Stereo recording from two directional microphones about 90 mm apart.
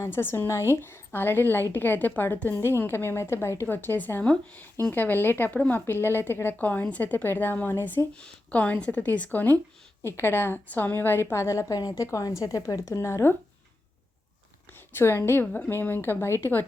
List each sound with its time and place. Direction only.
0.0 s a woman's voice: 25° left (ahead or behind)
8.1 s a woman's voice: 10° left (ahead or behind); by 11.6 s 30° left (ahead or behind)
11.7 s a woman's voice: 45° left (ahead or behind)
14.7 s a woman's voice: 25° left (ahead or behind)